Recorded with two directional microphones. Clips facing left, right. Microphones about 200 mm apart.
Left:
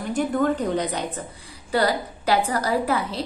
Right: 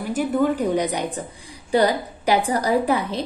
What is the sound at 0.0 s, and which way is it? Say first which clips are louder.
A woman's voice: right 2 dB; 5° right (ahead or behind).